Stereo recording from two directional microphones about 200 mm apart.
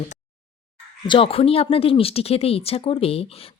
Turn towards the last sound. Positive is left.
turn(degrees=30)  # may be behind; listen again after turning